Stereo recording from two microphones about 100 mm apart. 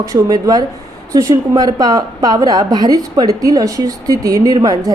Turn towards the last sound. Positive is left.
turn(degrees=-40)  # may be behind; listen again after turning